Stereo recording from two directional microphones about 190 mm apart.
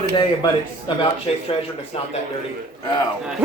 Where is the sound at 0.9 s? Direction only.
25° left (ahead or behind).